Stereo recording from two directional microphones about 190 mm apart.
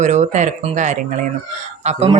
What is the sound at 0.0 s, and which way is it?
Speech, 40° right (ahead or behind).